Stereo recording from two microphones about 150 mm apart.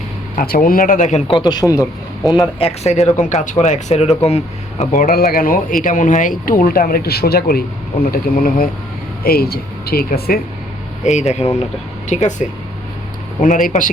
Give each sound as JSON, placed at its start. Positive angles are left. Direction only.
{"t": 0.3, "sound": "speech", "side_deg": 75}
{"t": 1.4, "sound": "speech", "side_deg": 30}
{"t": 2.6, "sound": "speech", "side_deg": 45}
{"t": 4.8, "sound": "speech", "side_deg": 65}
{"t": 9.2, "sound": "speech", "side_deg": 90}
{"t": 11.0, "sound": "speech", "side_deg": 50}